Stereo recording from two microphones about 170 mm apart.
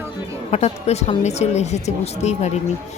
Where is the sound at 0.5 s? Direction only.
40° left (ahead or behind).